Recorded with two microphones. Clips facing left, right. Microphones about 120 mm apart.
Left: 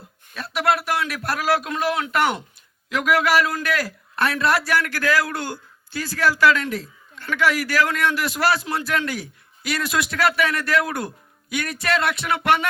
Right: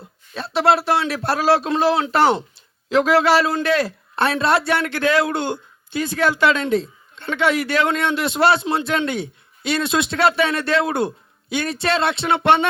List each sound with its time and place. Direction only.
0.3 s speech: 25° right (ahead or behind)